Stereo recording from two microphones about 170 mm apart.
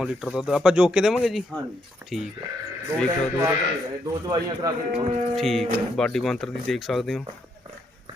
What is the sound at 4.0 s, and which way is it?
Speech, 25° right (ahead or behind).